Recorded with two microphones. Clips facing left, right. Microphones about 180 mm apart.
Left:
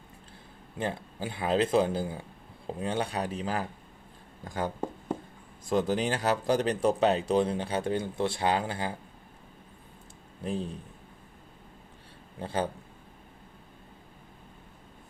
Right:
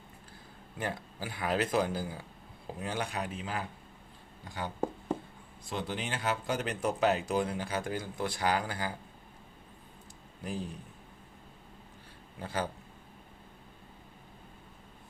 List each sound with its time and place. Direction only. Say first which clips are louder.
0.8 s speech: left 4 dB; 25° left (ahead or behind)
10.4 s speech: left 5 dB; 30° left (ahead or behind)
12.4 s speech: left 4 dB; 30° left (ahead or behind)